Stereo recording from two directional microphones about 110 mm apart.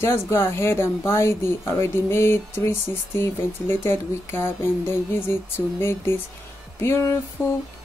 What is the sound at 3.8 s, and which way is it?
A woman's voice, 20° left (ahead or behind).